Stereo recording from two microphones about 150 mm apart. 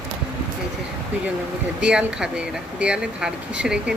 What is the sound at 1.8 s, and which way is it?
Speech, 5° right (ahead or behind).